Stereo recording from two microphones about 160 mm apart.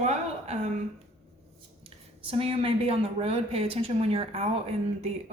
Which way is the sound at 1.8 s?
35° right (ahead or behind).